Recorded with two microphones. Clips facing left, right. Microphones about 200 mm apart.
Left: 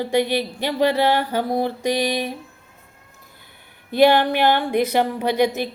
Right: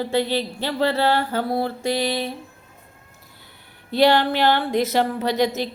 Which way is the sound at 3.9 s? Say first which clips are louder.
Left 2 dB; 15° left (ahead or behind).